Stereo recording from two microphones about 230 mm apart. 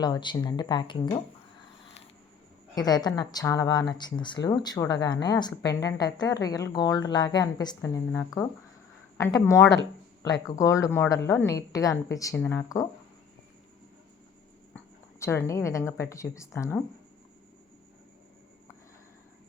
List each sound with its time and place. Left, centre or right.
0.0 s speech: centre
2.7 s a woman's voice: centre
15.2 s a woman's voice: centre